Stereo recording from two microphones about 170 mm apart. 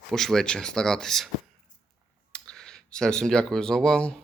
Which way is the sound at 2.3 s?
5° left (ahead or behind).